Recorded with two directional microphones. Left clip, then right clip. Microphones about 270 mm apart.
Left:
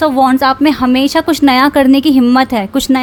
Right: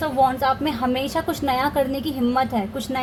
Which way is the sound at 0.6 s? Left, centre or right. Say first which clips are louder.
Left 12 dB; left.